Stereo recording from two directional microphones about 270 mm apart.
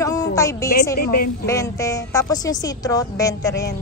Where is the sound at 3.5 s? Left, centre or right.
Left.